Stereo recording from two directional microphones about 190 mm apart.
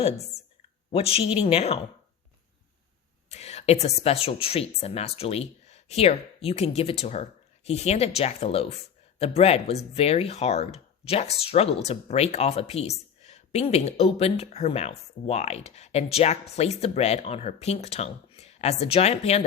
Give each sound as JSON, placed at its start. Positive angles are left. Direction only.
{"t": 0.9, "sound": "speech", "side_deg": 30}
{"t": 3.2, "sound": "speech", "side_deg": 35}